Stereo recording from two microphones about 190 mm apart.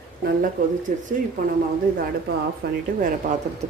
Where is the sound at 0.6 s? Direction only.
45° right (ahead or behind).